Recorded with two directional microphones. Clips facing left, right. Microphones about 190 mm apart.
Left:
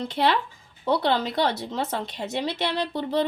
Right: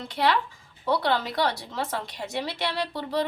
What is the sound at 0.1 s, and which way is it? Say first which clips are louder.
Speech: right 1 dB; 25° left (ahead or behind).